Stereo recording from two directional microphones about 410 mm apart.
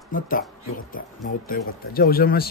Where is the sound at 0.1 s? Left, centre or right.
Centre.